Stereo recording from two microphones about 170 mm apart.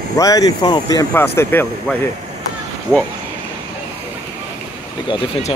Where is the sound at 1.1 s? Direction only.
15° left (ahead or behind).